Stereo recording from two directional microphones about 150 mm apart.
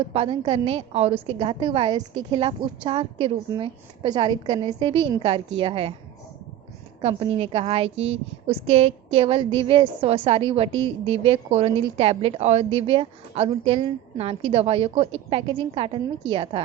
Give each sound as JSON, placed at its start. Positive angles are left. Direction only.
{"t": 0.0, "sound": "a woman's voice", "side_deg": -35}
{"t": 7.0, "sound": "a woman's voice", "side_deg": -40}